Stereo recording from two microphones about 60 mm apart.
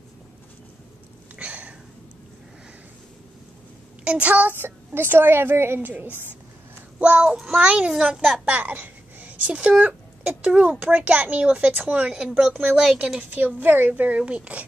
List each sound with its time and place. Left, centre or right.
1.3 s a sound: right
4.0 s a woman's voice: right
7.0 s a woman's voice: right
13.3 s a woman's voice: right